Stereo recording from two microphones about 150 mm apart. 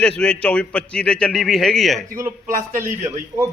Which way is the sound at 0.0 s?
5° left (ahead or behind).